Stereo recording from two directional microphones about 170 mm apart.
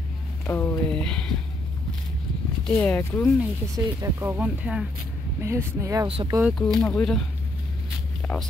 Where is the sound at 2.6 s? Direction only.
10° left (ahead or behind).